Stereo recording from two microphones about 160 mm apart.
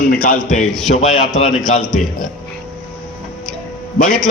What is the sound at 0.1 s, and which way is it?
Speech, 60° left (ahead or behind).